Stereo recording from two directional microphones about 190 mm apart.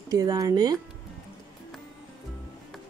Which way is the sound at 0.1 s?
20° right (ahead or behind).